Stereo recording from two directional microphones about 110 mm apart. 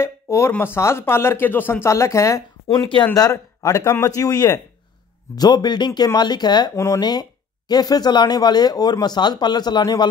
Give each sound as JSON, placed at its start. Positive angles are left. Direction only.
{"t": 0.0, "sound": "a sound", "side_deg": 25}
{"t": 0.5, "sound": "speech", "side_deg": 20}
{"t": 6.7, "sound": "speech", "side_deg": 30}